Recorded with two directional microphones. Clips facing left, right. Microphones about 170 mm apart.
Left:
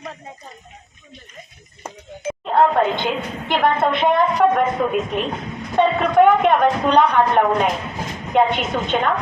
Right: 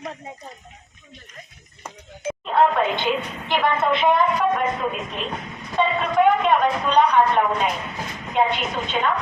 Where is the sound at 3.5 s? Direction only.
55° left (ahead or behind).